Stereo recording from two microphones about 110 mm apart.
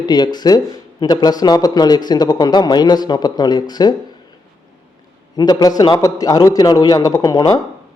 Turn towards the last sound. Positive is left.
turn(degrees=40)  # may be behind; listen again after turning